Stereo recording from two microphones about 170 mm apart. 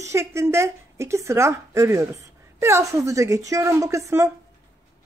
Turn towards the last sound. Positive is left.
turn(degrees=-20)  # may be behind; listen again after turning